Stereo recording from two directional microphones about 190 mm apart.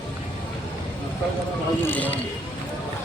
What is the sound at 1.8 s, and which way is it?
Speech, 10° left (ahead or behind).